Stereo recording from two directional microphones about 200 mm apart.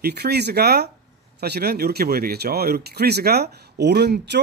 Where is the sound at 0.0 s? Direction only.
55° right (ahead or behind).